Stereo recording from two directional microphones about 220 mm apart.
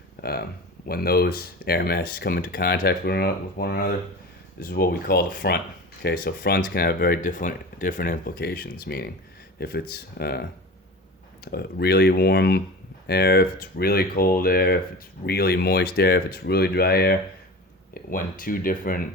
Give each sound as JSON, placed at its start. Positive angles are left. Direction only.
{"t": 0.2, "sound": "speech", "side_deg": 45}
{"t": 11.5, "sound": "speech", "side_deg": 45}